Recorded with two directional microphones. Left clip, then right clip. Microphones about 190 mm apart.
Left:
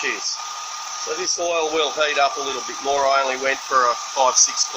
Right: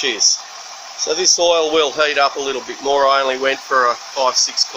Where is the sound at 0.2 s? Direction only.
10° right (ahead or behind).